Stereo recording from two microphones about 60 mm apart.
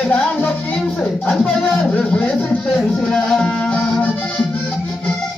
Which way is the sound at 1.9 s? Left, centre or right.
Left.